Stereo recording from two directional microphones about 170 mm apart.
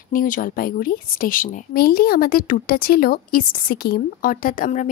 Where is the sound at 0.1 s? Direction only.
55° left (ahead or behind).